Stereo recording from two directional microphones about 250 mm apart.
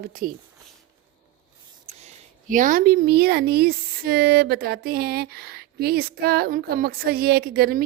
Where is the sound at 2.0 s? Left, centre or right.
Right.